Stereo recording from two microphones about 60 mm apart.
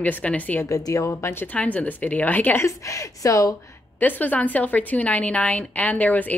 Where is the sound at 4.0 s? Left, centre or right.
Left.